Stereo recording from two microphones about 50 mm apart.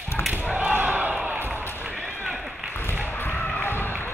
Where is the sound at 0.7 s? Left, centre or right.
Right.